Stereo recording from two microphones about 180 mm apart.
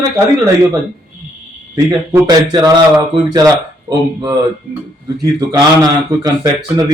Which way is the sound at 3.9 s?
20° right (ahead or behind).